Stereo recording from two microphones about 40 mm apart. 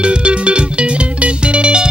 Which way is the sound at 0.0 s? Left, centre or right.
Right.